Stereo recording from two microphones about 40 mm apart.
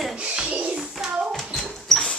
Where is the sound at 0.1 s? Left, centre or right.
Right.